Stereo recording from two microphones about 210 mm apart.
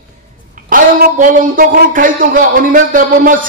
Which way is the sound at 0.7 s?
40° right (ahead or behind).